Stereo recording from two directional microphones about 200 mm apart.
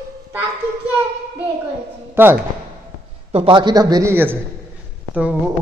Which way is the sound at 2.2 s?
10° right (ahead or behind).